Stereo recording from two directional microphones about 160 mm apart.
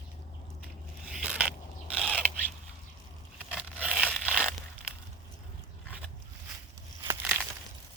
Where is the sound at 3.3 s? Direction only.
5° right (ahead or behind).